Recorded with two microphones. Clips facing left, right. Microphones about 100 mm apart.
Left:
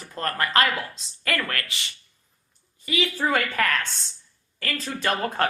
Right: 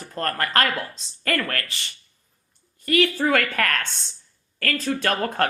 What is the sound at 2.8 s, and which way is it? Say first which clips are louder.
Speech: right 5 dB; 60° right (ahead or behind).